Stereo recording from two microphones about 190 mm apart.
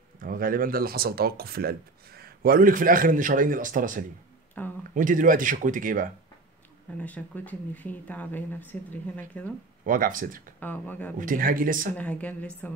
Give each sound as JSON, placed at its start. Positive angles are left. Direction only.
{"t": 0.2, "sound": "speech", "side_deg": -50}
{"t": 4.6, "sound": "a sound", "side_deg": 10}
{"t": 4.9, "sound": "speech", "side_deg": -45}
{"t": 7.0, "sound": "speech", "side_deg": 5}
{"t": 9.8, "sound": "speech", "side_deg": -45}
{"t": 10.6, "sound": "speech", "side_deg": 10}
{"t": 11.1, "sound": "speech", "side_deg": -45}
{"t": 11.9, "sound": "speech", "side_deg": 10}